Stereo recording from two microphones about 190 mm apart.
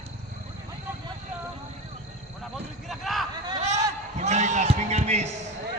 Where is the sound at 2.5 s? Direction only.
Centre (ahead or behind).